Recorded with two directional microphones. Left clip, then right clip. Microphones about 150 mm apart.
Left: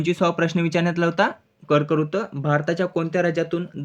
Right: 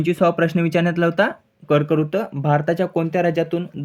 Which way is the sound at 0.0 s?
20° right (ahead or behind).